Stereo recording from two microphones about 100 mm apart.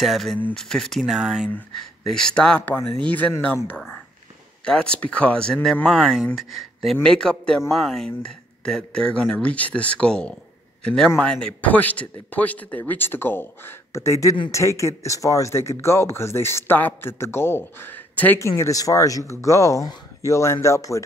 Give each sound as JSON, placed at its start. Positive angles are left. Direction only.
{"t": 0.0, "sound": "speech", "side_deg": 0}
{"t": 1.8, "sound": "a man's voice", "side_deg": 5}
{"t": 18.4, "sound": "speech", "side_deg": 30}